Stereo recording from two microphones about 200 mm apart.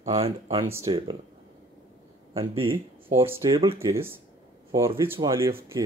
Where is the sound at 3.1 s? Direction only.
10° right (ahead or behind).